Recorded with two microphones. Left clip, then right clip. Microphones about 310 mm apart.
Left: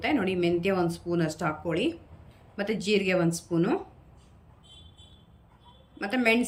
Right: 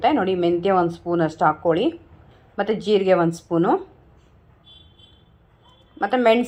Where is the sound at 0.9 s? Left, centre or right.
Centre.